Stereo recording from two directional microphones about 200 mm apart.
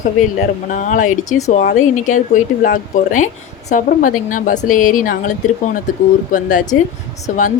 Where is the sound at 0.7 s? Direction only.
40° left (ahead or behind).